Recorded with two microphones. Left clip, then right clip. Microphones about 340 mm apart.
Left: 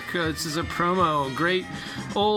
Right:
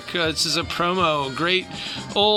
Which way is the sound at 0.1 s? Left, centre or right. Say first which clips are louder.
Right 6 dB; centre.